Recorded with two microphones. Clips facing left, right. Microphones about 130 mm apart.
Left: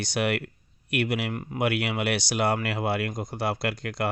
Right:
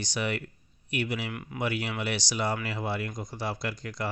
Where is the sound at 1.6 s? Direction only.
60° left (ahead or behind).